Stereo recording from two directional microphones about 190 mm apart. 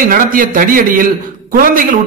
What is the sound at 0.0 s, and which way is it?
A man's voice, 50° right (ahead or behind).